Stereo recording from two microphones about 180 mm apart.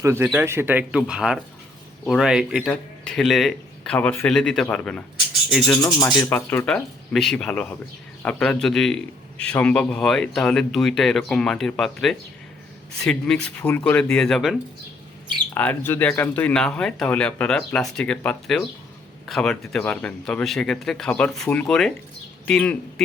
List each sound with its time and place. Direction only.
0.0 s a man's voice: 15° right (ahead or behind); by 5.8 s centre (ahead or behind)
6.1 s speech: 20° left (ahead or behind)
6.3 s a man's voice: 10° left (ahead or behind)